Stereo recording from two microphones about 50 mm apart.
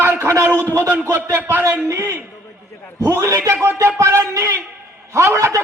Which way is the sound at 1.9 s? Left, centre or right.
Right.